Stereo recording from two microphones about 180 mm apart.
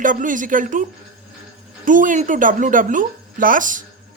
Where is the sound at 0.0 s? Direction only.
45° right (ahead or behind).